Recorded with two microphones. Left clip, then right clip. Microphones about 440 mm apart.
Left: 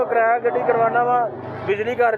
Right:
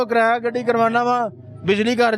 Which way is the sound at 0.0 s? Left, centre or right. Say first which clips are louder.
Even; right.